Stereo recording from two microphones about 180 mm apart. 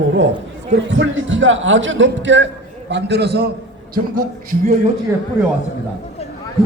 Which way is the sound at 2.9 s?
70° right (ahead or behind).